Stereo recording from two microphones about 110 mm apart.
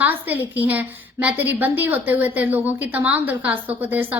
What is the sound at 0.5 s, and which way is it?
A woman's voice, 15° right (ahead or behind).